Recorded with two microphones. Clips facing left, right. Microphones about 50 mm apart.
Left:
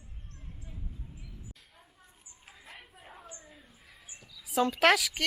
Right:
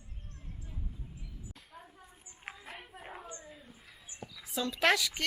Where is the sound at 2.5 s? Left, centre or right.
Right.